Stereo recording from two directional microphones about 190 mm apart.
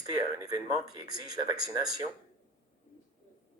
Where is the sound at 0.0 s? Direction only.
20° right (ahead or behind).